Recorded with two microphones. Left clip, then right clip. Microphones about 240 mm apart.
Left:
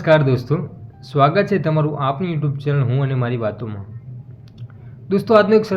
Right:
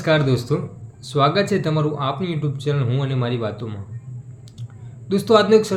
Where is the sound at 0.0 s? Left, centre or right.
Centre.